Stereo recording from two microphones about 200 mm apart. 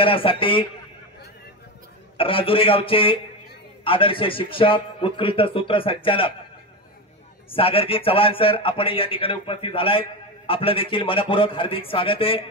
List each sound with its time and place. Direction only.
0.0 s a man's voice: 25° left (ahead or behind)
2.1 s a man's voice: 25° left (ahead or behind)
7.4 s a man's voice: 25° left (ahead or behind)